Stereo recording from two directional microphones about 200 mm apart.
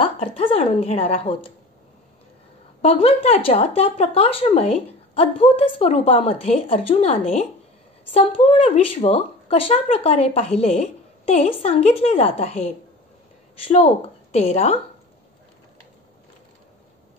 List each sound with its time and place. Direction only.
0.0 s a woman's voice: 30° left (ahead or behind)
2.8 s speech: 30° left (ahead or behind)